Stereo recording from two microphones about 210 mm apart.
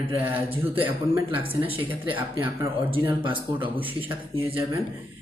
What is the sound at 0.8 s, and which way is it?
Speech, 10° right (ahead or behind).